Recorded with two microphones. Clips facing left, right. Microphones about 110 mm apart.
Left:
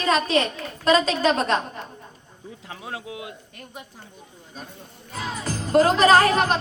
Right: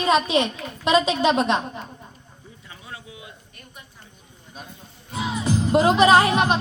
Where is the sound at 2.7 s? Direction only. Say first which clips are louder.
Left 6 dB; 90° left.